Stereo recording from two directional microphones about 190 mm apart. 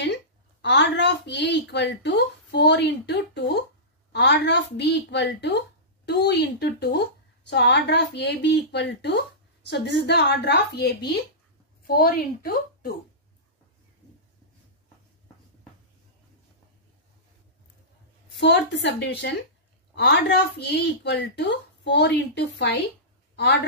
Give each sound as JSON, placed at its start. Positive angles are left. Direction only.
{"t": 0.0, "sound": "a woman's voice", "side_deg": 65}
{"t": 18.4, "sound": "a woman's voice", "side_deg": 65}